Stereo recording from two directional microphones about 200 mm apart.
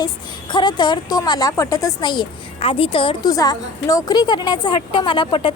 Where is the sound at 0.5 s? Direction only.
20° left (ahead or behind).